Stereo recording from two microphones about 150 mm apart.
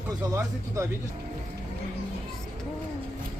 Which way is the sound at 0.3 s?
20° right (ahead or behind).